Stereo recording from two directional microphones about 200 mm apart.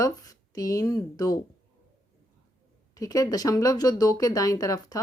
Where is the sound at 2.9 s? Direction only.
15° left (ahead or behind).